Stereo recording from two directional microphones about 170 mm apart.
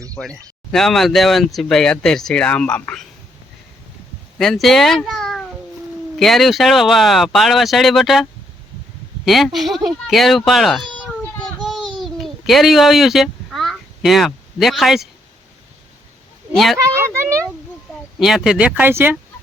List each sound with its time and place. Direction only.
0.1 s speech: 5° left (ahead or behind)
4.4 s speech: centre (ahead or behind)
9.2 s a sound: centre (ahead or behind)
16.5 s speech: centre (ahead or behind)
16.7 s speech: 15° right (ahead or behind)
18.2 s speech: 5° right (ahead or behind)